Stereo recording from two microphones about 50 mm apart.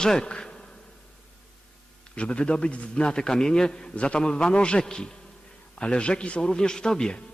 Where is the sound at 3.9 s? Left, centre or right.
Left.